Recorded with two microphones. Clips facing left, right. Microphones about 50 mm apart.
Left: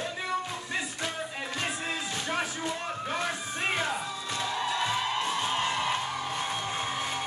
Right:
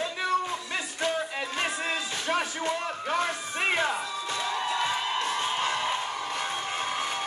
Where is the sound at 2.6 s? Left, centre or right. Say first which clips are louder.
Right 3 dB; right.